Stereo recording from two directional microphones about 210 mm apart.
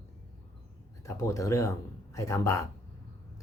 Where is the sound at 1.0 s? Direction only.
15° left (ahead or behind).